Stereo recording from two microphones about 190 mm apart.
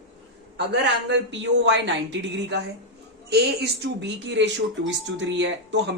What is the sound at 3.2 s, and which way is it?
A woman's voice, 60° right (ahead or behind).